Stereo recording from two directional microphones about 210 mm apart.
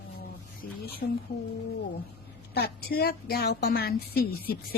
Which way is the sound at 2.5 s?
50° left (ahead or behind).